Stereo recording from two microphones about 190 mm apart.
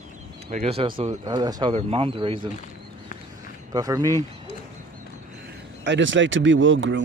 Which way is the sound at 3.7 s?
20° right (ahead or behind).